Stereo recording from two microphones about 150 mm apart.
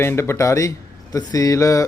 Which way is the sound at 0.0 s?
15° left (ahead or behind).